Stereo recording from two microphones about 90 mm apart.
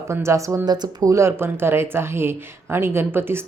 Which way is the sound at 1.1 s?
30° right (ahead or behind).